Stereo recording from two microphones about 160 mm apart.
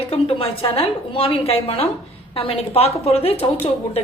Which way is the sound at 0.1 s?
35° left (ahead or behind).